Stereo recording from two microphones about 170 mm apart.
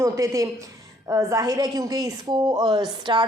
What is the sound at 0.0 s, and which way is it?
A woman's voice, 20° right (ahead or behind).